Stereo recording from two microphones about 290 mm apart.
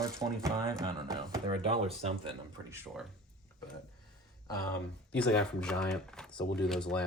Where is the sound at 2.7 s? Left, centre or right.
Centre.